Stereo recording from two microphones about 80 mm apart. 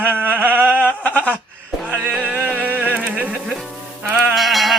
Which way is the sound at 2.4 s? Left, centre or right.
Centre.